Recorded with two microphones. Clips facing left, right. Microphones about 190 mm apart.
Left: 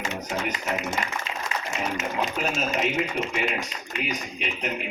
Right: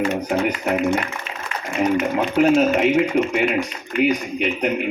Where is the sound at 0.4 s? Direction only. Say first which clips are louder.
Right 9 dB; 60° right (ahead or behind).